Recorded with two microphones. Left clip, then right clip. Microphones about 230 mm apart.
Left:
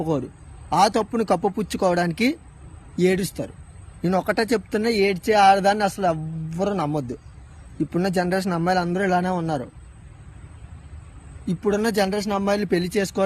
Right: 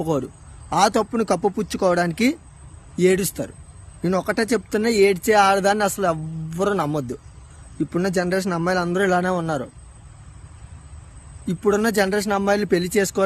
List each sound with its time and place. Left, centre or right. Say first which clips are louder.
0.0 s speech: right 2 dB; centre
11.4 s speech: right 3 dB; centre